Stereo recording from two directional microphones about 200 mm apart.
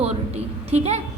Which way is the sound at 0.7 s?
35° right (ahead or behind).